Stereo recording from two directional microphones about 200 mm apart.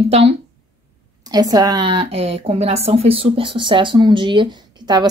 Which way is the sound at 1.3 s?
20° right (ahead or behind).